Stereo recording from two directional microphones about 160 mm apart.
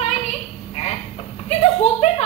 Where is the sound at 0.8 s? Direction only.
45° left (ahead or behind).